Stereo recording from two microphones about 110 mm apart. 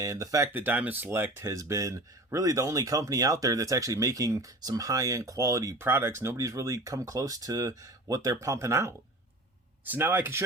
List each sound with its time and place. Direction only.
0.0 s speech: 30° right (ahead or behind)
0.5 s speech: 15° right (ahead or behind)